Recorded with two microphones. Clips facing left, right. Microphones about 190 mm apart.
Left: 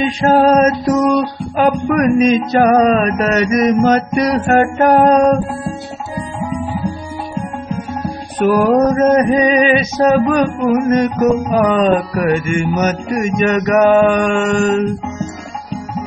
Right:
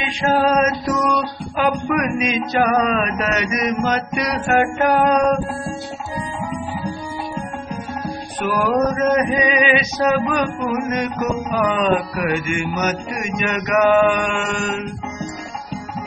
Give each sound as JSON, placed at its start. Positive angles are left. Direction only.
{"t": 0.0, "sound": "music", "side_deg": 40}
{"t": 8.4, "sound": "music", "side_deg": 40}